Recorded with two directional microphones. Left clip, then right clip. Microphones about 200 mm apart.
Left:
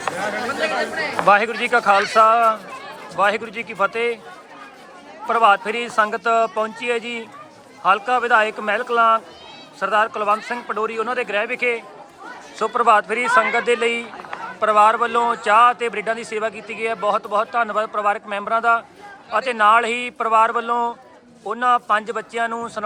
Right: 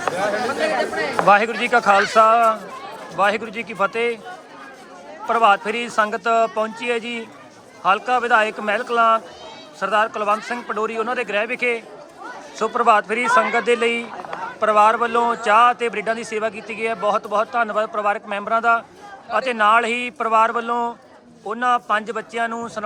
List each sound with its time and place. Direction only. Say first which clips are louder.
0.6 s speech: left 1 dB; 55° right (ahead or behind)
1.2 s speech: even; 5° right (ahead or behind)
5.3 s a man's voice: even; 5° right (ahead or behind)